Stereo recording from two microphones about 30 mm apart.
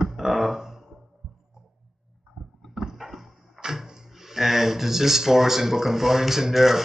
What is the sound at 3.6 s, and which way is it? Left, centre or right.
Speech, centre.